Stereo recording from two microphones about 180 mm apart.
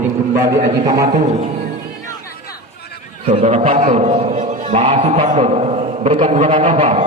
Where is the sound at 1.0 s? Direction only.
45° right (ahead or behind).